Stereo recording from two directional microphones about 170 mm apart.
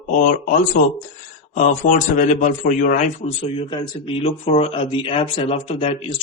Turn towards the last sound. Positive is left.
turn(degrees=35)  # may be behind; listen again after turning